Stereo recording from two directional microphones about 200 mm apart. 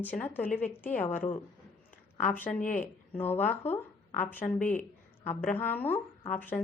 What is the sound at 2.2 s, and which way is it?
Speech, 10° left (ahead or behind).